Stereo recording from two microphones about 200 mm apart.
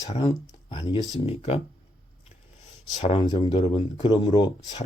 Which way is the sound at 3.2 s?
20° left (ahead or behind).